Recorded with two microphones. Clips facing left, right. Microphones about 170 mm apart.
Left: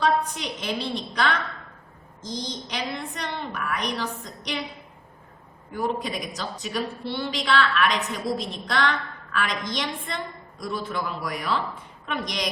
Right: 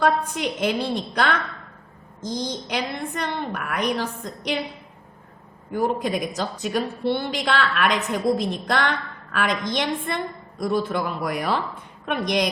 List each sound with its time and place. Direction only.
0.0 s a woman's voice: 55° right (ahead or behind)
5.7 s a woman's voice: 55° right (ahead or behind)